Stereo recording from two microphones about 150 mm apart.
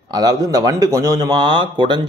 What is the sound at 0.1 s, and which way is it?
A man's voice, 25° right (ahead or behind).